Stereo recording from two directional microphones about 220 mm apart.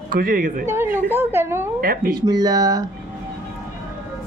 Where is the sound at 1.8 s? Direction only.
40° right (ahead or behind).